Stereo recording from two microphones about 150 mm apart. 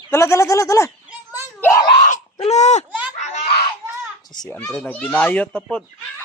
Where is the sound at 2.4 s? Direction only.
50° left (ahead or behind).